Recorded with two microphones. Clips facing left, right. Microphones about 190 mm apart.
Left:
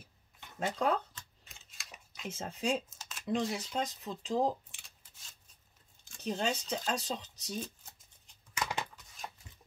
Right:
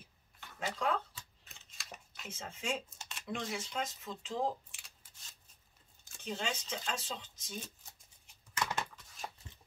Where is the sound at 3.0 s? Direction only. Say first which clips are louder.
Even; centre (ahead or behind).